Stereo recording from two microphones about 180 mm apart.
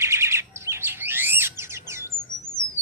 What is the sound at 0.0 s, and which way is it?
Chirp, 15° right (ahead or behind).